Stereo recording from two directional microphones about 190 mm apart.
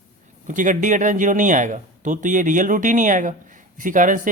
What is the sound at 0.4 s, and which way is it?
Speech, 45° right (ahead or behind).